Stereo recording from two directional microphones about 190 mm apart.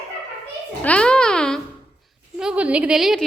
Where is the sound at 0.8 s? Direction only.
5° left (ahead or behind).